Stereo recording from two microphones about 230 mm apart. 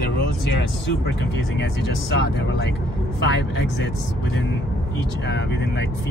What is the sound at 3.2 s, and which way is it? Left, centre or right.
Speech, left.